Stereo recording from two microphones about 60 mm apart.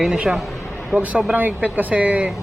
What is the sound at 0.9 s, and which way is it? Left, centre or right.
Speech, right.